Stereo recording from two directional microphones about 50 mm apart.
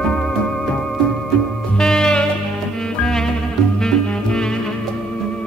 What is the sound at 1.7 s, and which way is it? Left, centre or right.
Music, centre.